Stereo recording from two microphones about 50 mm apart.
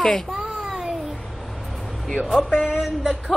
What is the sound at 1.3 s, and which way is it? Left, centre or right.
Vehicle, centre.